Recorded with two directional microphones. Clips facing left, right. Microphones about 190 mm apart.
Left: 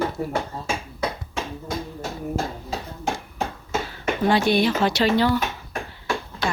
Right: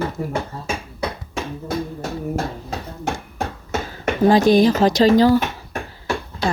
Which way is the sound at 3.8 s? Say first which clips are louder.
Right 6 dB; 40° right (ahead or behind).